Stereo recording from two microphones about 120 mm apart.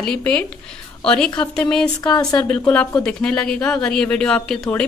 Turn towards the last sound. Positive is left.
turn(degrees=10)  # may be behind; listen again after turning